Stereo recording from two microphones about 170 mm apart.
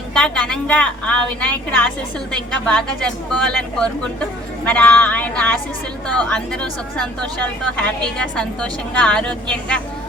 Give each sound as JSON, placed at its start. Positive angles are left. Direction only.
{"t": 0.1, "sound": "a woman's voice", "side_deg": 5}